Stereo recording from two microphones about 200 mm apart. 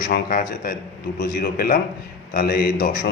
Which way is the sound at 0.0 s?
45° left (ahead or behind).